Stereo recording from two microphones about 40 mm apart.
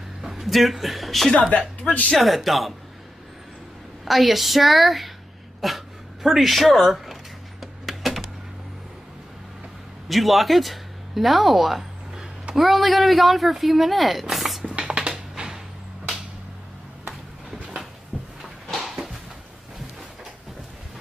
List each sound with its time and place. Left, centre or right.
0.2 s speech: centre
1.8 s speech: left
2.1 s speech: centre
4.0 s speech: centre
7.6 s a sound: centre
10.0 s speech: centre
14.3 s music: centre
14.8 s typing: right
18.1 s drawer open or close: centre
18.8 s a sound: centre